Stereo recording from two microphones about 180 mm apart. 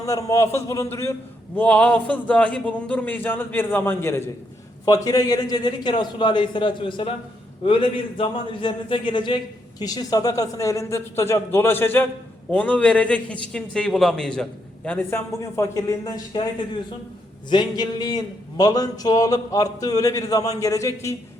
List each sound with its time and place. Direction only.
0.0 s a man's voice: 20° left (ahead or behind)
17.5 s a man's voice: 25° left (ahead or behind)